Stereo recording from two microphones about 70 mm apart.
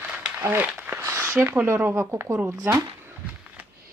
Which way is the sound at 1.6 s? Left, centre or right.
Right.